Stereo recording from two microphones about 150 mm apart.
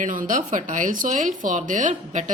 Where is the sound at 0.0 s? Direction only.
65° right (ahead or behind).